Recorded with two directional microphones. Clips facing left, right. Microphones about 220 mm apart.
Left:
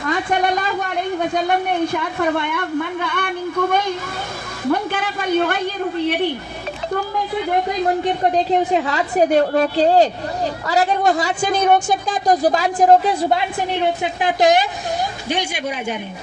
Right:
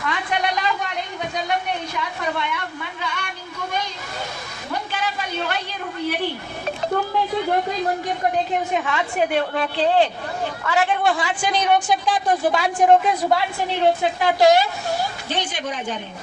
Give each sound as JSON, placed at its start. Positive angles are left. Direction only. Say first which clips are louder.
{"t": 0.0, "sound": "a woman's voice", "louder": "left 5 dB", "side_deg": 45}
{"t": 8.0, "sound": "a woman's voice", "louder": "left 5 dB", "side_deg": 30}
{"t": 14.0, "sound": "a woman's voice", "louder": "even", "side_deg": 15}